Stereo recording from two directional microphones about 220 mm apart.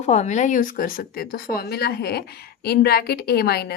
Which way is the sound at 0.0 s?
30° left (ahead or behind).